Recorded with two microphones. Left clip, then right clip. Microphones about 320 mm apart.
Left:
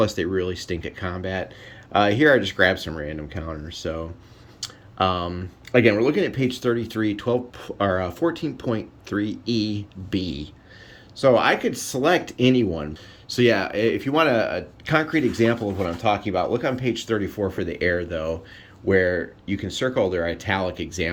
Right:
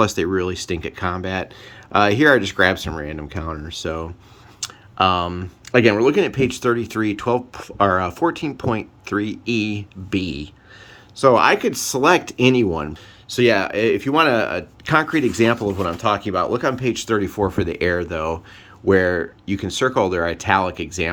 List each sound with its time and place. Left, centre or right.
0.0 s speech: centre